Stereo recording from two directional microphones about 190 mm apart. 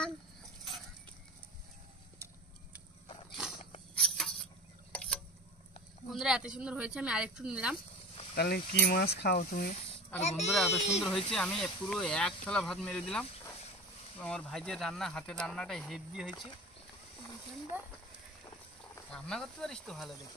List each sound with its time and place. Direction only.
3.3 s cricket: 5° right (ahead or behind)
3.9 s a sound: centre (ahead or behind)
6.1 s speech: 5° right (ahead or behind)
8.4 s speech: 55° left (ahead or behind)
10.2 s speech: 35° left (ahead or behind)
11.0 s speech: centre (ahead or behind)
17.7 s speech: 10° right (ahead or behind)
19.1 s speech: 5° left (ahead or behind)